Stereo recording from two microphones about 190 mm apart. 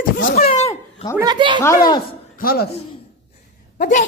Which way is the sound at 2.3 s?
50° left (ahead or behind).